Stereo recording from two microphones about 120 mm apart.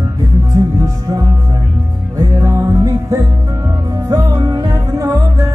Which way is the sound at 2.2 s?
25° right (ahead or behind).